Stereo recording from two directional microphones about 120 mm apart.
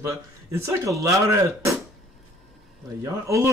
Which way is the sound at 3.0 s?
25° right (ahead or behind).